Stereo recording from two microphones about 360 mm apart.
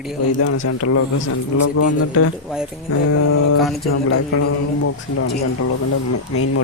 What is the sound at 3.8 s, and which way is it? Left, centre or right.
Speech, left.